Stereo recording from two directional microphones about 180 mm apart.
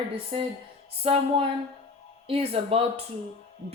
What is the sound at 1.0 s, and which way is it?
Speech, 35° right (ahead or behind).